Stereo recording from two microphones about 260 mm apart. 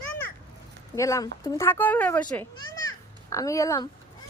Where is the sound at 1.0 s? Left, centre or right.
Centre.